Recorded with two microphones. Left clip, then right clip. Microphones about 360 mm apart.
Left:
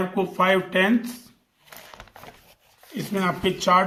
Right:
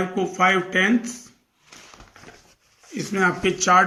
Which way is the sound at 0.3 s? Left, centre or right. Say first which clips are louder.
Right 1 dB; centre.